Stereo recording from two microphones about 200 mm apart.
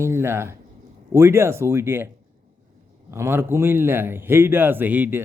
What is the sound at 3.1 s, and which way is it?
A man's voice, 10° right (ahead or behind).